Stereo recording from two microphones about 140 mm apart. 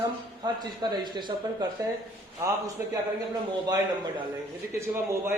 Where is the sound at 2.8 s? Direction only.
15° right (ahead or behind).